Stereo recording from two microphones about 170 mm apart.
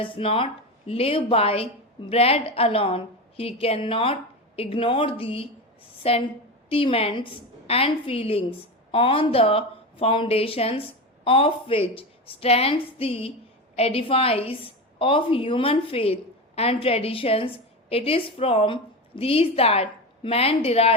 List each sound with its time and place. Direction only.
0.0 s a woman's voice: 30° left (ahead or behind)